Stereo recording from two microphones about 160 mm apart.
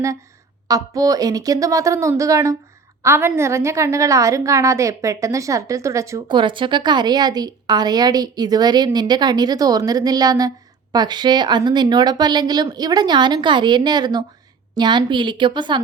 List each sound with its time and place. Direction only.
0.7 s a woman's voice: 20° right (ahead or behind)